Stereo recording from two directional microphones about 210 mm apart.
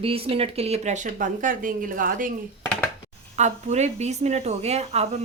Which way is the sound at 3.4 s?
35° right (ahead or behind).